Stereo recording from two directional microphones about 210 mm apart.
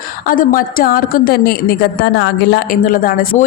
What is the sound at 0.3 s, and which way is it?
A woman's voice, 40° left (ahead or behind).